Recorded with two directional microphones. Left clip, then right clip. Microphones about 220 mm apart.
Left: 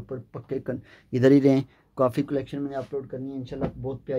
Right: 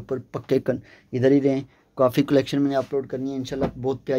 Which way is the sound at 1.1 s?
15° left (ahead or behind).